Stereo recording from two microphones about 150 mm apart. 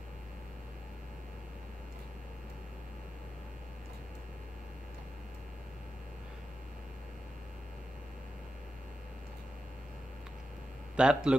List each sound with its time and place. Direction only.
11.0 s a man's voice: 5° right (ahead or behind)